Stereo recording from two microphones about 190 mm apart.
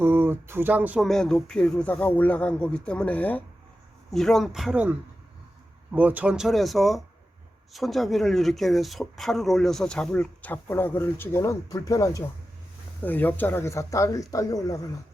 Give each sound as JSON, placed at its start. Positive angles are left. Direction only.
{"t": 0.0, "sound": "speech", "side_deg": -10}